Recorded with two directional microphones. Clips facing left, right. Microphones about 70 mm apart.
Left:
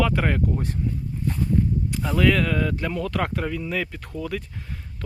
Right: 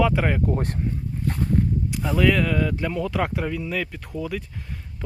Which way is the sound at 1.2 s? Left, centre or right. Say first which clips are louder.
Even; right.